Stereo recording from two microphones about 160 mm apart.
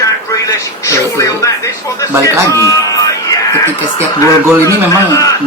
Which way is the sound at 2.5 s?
20° left (ahead or behind).